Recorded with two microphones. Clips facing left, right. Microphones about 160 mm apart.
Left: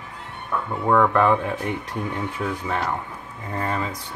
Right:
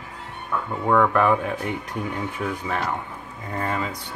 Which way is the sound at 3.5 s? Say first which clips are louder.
Even; 20° left (ahead or behind).